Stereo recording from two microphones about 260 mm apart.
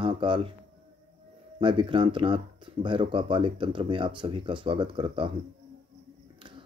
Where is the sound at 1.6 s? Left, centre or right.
Centre.